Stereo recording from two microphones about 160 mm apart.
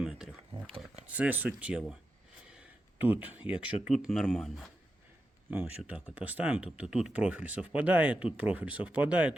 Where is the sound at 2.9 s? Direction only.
10° right (ahead or behind).